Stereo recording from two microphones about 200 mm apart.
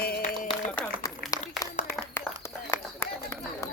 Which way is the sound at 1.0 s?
15° left (ahead or behind).